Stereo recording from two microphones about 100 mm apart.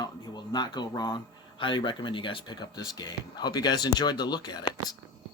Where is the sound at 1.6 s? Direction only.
55° left (ahead or behind).